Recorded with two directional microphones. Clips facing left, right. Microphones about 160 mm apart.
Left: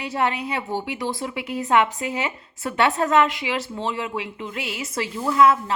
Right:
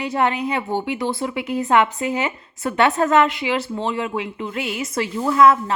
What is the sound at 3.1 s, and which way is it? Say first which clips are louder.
A woman's voice: right 2 dB; 35° right (ahead or behind).